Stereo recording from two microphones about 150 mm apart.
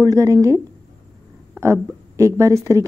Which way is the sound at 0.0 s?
20° right (ahead or behind).